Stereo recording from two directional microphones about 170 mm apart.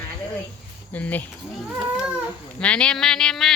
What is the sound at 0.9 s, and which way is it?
Speech, 10° left (ahead or behind).